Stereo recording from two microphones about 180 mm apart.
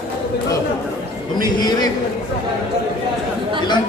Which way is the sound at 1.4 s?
20° left (ahead or behind).